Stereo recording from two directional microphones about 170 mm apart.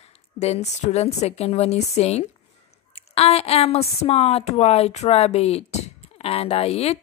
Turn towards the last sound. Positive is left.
turn(degrees=35)  # may be behind; listen again after turning